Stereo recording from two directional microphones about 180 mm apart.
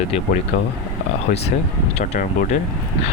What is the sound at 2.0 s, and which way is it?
Speech, 45° left (ahead or behind).